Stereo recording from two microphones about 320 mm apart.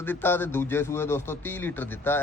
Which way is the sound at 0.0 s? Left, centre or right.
Centre.